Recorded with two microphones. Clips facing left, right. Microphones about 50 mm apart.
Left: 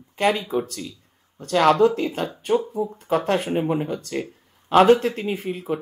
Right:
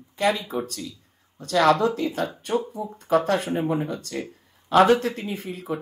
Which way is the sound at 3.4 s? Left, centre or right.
Left.